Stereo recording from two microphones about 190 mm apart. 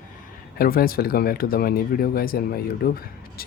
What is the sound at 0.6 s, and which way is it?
Speech, 50° left (ahead or behind).